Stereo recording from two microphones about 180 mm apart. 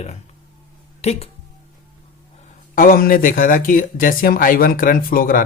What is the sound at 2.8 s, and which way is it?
Speech, 50° left (ahead or behind).